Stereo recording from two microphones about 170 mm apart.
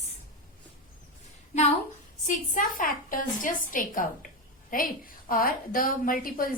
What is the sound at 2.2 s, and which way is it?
A woman's voice, 55° left (ahead or behind).